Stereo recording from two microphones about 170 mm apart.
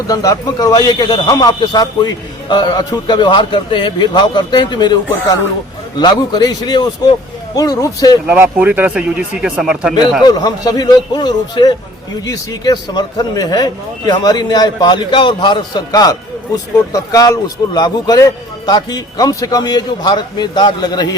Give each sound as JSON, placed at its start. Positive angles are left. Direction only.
{"t": 0.1, "sound": "a man's voice", "side_deg": 20}
{"t": 6.0, "sound": "a man's voice", "side_deg": 25}
{"t": 8.3, "sound": "speech", "side_deg": -10}
{"t": 10.2, "sound": "a man's voice", "side_deg": 25}